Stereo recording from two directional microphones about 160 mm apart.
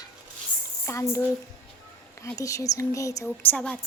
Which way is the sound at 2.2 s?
20° left (ahead or behind).